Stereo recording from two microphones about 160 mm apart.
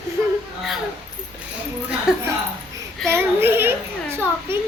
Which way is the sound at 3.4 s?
15° right (ahead or behind).